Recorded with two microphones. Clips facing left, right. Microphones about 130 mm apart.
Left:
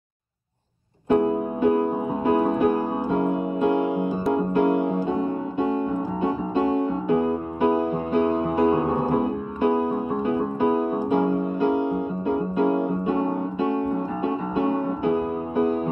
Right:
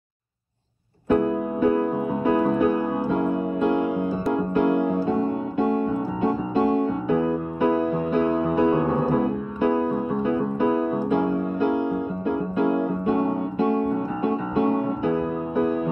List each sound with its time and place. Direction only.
1.2 s music: 20° left (ahead or behind)
7.1 s music: 15° left (ahead or behind)
12.5 s piano: 15° left (ahead or behind)
15.1 s music: 15° left (ahead or behind)